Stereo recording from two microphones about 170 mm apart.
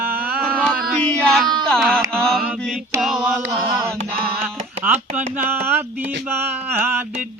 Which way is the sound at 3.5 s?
30° right (ahead or behind).